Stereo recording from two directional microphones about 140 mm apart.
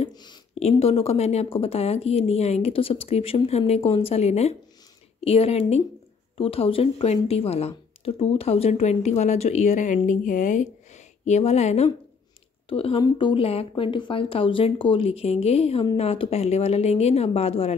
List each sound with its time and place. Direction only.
0.1 s speech: 30° left (ahead or behind)
0.6 s a woman's voice: 45° left (ahead or behind)
12.6 s a woman's voice: 40° left (ahead or behind)